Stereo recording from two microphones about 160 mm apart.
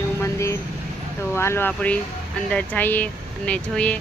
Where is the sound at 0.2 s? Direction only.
20° left (ahead or behind).